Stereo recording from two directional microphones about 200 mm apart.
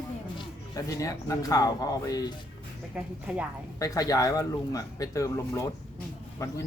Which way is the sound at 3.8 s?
15° left (ahead or behind).